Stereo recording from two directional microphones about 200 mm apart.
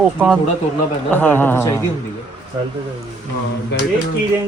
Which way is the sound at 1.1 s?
10° left (ahead or behind).